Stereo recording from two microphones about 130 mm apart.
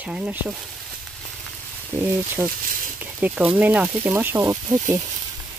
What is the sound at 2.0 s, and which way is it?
Speech, 20° right (ahead or behind).